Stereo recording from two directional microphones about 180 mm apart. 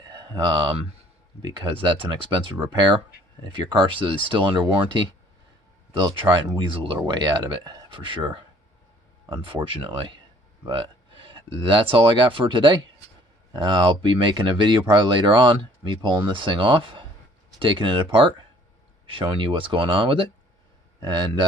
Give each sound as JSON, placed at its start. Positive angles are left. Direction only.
{"t": 0.0, "sound": "speech", "side_deg": -25}